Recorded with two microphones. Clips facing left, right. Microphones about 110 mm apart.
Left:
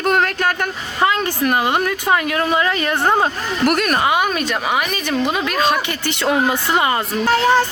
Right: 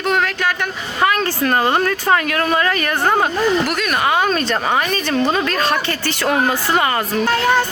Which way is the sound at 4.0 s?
15° left (ahead or behind).